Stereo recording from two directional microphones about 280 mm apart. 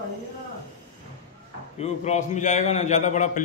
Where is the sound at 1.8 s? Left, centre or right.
Left.